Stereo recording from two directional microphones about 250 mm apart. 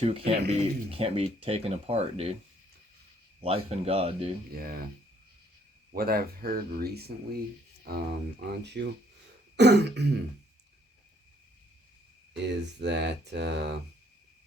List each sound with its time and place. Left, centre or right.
0.0 s speech: right
3.4 s speech: right
4.5 s speech: right
5.9 s speech: right
12.8 s speech: right